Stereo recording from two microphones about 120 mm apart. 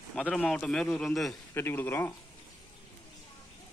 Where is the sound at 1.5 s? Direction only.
20° left (ahead or behind).